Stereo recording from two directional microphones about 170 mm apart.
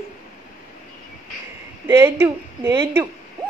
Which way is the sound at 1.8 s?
15° right (ahead or behind).